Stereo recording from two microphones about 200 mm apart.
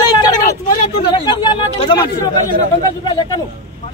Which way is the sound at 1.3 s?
25° left (ahead or behind).